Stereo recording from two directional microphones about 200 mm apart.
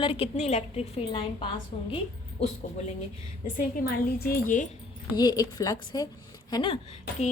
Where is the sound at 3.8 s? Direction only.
50° left (ahead or behind).